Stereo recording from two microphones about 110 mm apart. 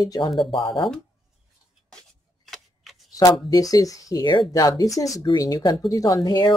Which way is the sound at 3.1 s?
35° left (ahead or behind).